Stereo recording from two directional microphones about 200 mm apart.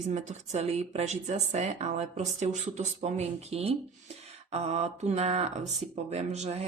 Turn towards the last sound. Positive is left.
turn(degrees=-30)  # may be behind; listen again after turning